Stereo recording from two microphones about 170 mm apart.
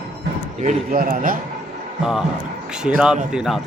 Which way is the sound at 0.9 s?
55° right (ahead or behind).